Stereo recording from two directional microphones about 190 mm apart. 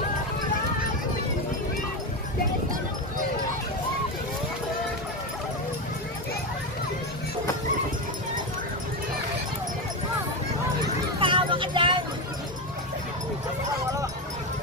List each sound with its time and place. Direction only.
11.1 s vehicle: 25° right (ahead or behind)